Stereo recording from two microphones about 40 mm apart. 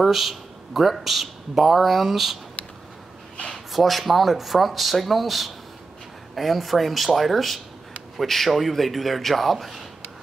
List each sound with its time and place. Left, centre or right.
0.0 s speech: centre
2.6 s a sound: left
3.7 s speech: centre